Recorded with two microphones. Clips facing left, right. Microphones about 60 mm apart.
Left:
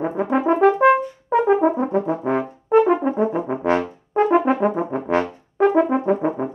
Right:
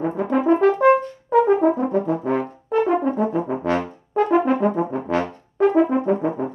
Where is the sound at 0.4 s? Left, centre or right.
Left.